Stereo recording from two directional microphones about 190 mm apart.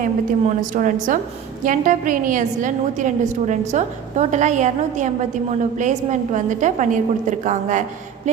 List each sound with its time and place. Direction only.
0.0 s a woman's voice: 45° right (ahead or behind)